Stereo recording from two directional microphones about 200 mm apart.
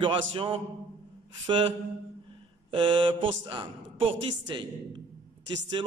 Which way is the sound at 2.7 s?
25° right (ahead or behind).